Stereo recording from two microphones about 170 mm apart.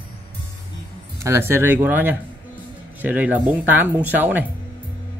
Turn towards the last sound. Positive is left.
turn(degrees=-10)  # may be behind; listen again after turning